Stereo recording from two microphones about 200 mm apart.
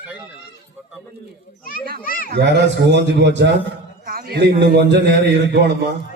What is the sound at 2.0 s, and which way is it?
Speech, 45° left (ahead or behind).